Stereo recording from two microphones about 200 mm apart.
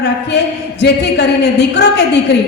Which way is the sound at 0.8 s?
55° left (ahead or behind).